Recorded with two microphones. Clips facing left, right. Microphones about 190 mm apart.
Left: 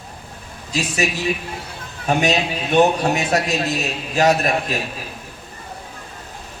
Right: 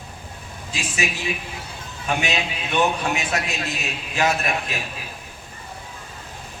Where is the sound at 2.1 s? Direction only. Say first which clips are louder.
Left 6 dB; 40° left (ahead or behind).